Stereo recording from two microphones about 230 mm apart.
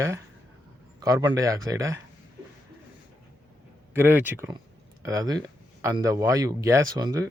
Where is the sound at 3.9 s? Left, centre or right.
Centre.